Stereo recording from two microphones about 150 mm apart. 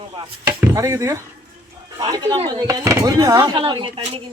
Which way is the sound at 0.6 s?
20° right (ahead or behind).